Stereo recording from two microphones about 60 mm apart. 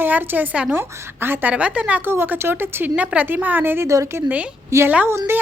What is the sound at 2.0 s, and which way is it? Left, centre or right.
Speech, right.